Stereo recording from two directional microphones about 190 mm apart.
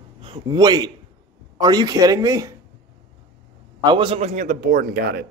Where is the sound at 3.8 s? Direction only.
25° right (ahead or behind); by 5.2 s 55° right (ahead or behind).